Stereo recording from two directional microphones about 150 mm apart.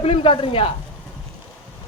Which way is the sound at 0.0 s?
35° left (ahead or behind).